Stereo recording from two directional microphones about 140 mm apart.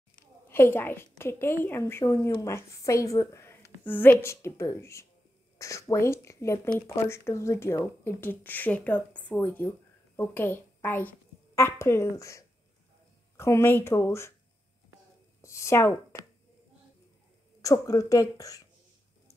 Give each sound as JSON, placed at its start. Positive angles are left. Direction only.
{"t": 0.5, "sound": "a woman's voice", "side_deg": 15}
{"t": 15.4, "sound": "speech", "side_deg": 20}
{"t": 17.6, "sound": "speech", "side_deg": 25}